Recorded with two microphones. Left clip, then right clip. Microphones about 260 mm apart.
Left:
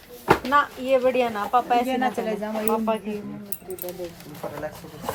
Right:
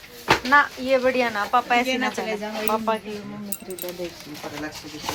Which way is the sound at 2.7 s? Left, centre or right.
Centre.